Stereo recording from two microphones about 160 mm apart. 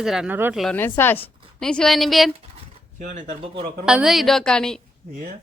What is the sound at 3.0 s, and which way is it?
Speech, 50° right (ahead or behind).